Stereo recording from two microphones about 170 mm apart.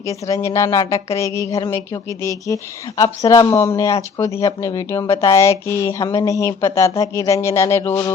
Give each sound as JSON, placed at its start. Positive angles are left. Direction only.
{"t": 0.0, "sound": "a woman's voice", "side_deg": 20}